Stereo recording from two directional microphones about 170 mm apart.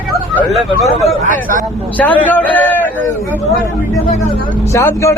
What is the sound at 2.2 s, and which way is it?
Speech, 10° left (ahead or behind).